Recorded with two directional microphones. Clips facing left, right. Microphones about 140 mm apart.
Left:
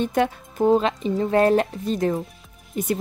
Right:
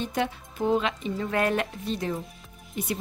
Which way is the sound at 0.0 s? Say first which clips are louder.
Left 7 dB; 50° left (ahead or behind).